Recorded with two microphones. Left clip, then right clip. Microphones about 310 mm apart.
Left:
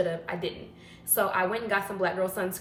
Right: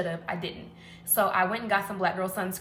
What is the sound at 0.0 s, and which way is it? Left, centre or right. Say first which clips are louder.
A woman's voice: left 2 dB; centre.